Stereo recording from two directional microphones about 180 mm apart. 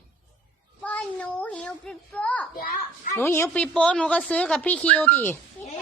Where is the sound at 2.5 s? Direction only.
55° left (ahead or behind).